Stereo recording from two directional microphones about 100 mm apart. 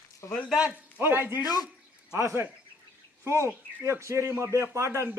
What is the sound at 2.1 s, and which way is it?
A man's voice, 25° right (ahead or behind).